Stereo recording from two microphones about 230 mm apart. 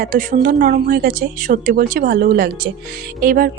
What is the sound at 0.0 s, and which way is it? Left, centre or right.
Speech, right.